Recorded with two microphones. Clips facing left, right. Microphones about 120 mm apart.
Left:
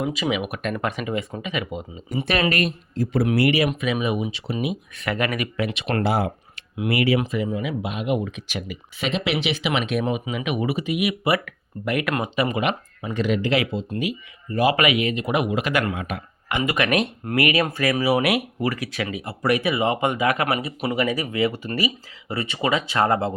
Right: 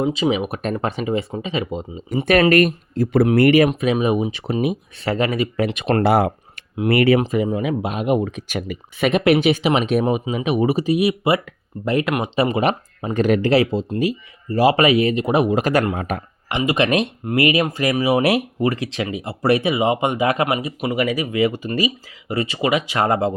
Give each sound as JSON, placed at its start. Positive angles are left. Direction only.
{"t": 0.0, "sound": "speech", "side_deg": -30}
{"t": 2.2, "sound": "speech", "side_deg": -50}
{"t": 5.0, "sound": "speech", "side_deg": -30}
{"t": 6.0, "sound": "speech", "side_deg": -55}
{"t": 16.5, "sound": "speech", "side_deg": -25}